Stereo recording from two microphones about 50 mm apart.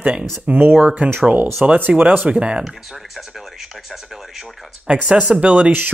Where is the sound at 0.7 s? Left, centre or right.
Right.